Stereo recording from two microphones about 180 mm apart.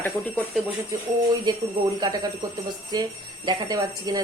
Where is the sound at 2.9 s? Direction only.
25° right (ahead or behind).